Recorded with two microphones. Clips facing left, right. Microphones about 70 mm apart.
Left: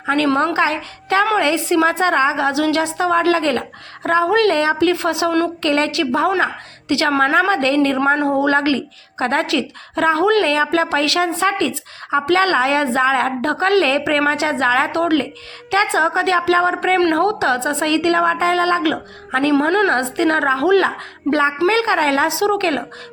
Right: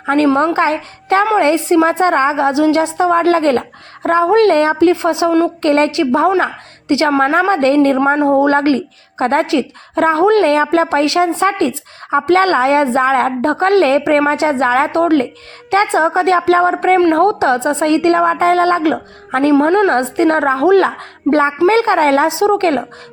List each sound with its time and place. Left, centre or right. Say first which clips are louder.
0.0 s a woman's voice: right 4 dB; right
8.0 s a woman's voice: right 3 dB; right
8.3 s a woman's voice: right 5 dB; right
19.6 s a woman's voice: right 4 dB; right